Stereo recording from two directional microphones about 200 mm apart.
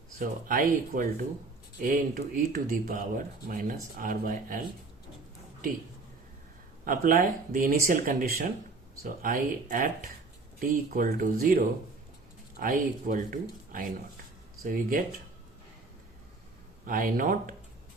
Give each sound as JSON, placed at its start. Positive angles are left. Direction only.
{"t": 0.2, "sound": "speech", "side_deg": -45}
{"t": 6.8, "sound": "speech", "side_deg": -45}
{"t": 16.8, "sound": "speech", "side_deg": -45}